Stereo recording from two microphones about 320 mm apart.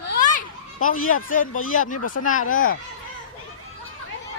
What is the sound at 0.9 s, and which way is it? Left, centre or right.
Speech, left.